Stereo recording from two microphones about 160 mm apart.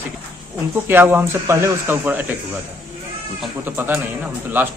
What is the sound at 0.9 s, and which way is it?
A man's voice, 15° right (ahead or behind).